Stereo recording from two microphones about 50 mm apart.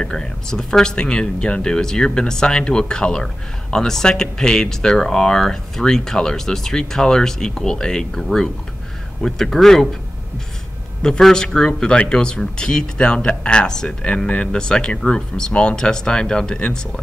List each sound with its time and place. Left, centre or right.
0.0 s speech: centre
11.0 s speech: centre